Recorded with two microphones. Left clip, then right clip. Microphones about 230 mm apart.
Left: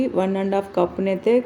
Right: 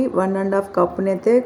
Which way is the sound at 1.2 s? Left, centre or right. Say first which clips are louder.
Right 2 dB; centre.